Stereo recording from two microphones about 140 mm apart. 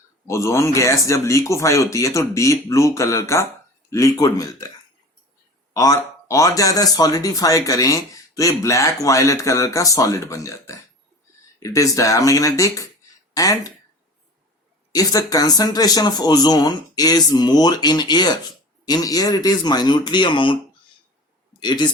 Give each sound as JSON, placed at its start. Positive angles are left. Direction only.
{"t": 0.3, "sound": "speech", "side_deg": 20}
{"t": 5.7, "sound": "speech", "side_deg": 20}
{"t": 14.9, "sound": "speech", "side_deg": 25}
{"t": 21.6, "sound": "speech", "side_deg": 30}